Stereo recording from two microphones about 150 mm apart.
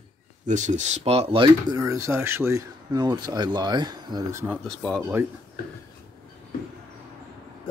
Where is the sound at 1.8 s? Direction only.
20° right (ahead or behind).